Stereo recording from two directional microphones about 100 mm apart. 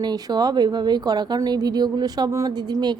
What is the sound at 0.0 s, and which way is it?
Speech, 45° right (ahead or behind).